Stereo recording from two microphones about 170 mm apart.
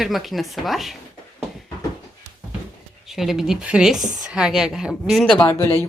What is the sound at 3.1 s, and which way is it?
Speech, centre (ahead or behind).